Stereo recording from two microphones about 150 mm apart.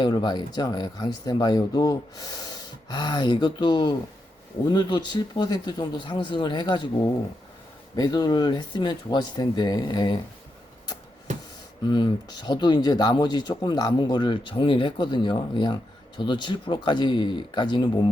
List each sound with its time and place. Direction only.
0.0 s speech: 30° left (ahead or behind)
11.9 s speech: 25° left (ahead or behind)